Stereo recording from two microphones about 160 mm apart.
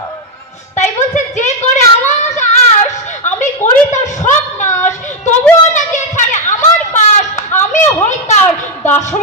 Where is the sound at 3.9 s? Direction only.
50° left (ahead or behind).